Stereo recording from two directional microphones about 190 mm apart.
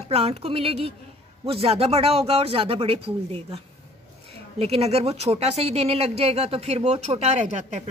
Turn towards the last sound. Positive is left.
turn(degrees=-35)  # may be behind; listen again after turning